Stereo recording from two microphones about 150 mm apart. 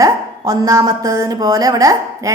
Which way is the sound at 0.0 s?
25° right (ahead or behind).